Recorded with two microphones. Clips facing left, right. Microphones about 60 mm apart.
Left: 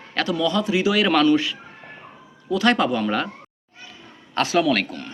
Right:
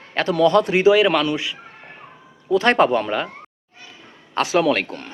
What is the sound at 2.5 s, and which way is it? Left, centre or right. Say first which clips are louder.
Speech: right 3 dB; right.